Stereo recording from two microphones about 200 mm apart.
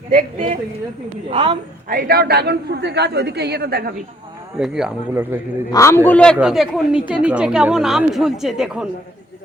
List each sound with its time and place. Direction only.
0.1 s a woman's voice: 40° right (ahead or behind)
1.3 s a woman's voice: 25° right (ahead or behind)
1.9 s a man's voice: 45° right (ahead or behind)
4.5 s a woman's voice: 5° right (ahead or behind)
5.7 s a woman's voice: 15° left (ahead or behind); by 8.9 s 5° right (ahead or behind)